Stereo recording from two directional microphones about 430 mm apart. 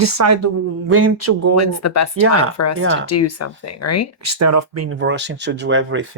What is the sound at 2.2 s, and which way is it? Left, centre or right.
Speech, right.